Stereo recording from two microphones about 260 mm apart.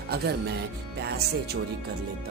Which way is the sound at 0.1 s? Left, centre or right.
Right.